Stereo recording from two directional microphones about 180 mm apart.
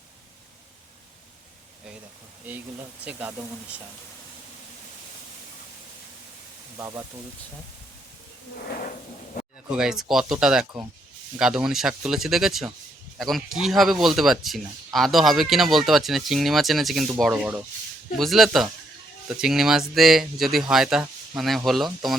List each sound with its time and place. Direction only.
3.0 s speech: 10° right (ahead or behind)
6.7 s speech: 15° right (ahead or behind)
9.6 s speech: 5° right (ahead or behind)